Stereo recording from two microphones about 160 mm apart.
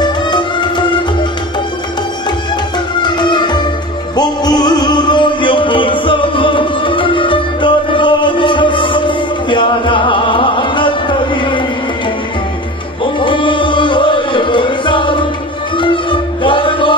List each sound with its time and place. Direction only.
0.0 s music: 30° left (ahead or behind)
3.0 s music: 30° left (ahead or behind)
13.0 s chant: 30° left (ahead or behind)
15.8 s music: 30° left (ahead or behind)